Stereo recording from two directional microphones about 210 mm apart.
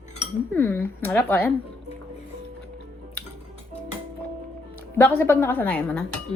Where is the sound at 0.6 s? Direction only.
10° left (ahead or behind).